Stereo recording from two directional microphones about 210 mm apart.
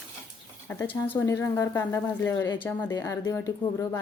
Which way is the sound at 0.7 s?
10° left (ahead or behind).